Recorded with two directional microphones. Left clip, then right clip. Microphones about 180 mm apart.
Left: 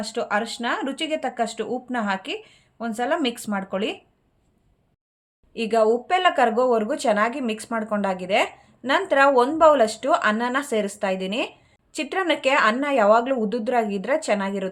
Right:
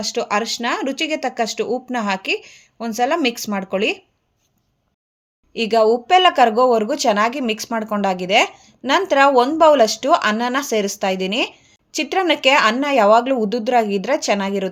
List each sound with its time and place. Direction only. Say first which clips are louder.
0.0 s speech: right 4 dB; 35° right (ahead or behind)
5.5 s speech: right 4 dB; 35° right (ahead or behind)